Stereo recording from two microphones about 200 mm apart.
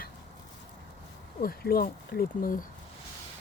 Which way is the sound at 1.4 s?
50° left (ahead or behind).